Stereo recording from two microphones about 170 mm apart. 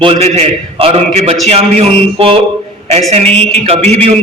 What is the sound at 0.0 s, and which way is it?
A man's voice, 35° right (ahead or behind).